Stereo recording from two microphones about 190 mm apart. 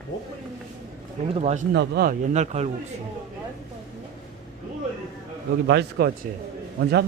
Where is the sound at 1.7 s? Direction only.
55° right (ahead or behind).